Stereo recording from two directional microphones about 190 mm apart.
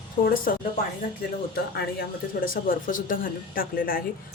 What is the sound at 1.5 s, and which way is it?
Speech, 55° left (ahead or behind).